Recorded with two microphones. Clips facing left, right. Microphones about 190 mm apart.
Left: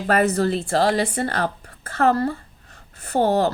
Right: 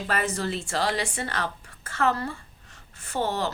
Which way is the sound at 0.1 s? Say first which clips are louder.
Left 10 dB; 55° left (ahead or behind).